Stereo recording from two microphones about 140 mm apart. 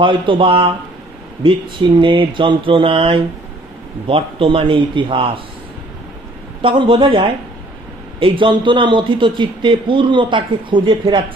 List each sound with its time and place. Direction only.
0.0 s a man's voice: 35° right (ahead or behind)
6.6 s a man's voice: 35° right (ahead or behind)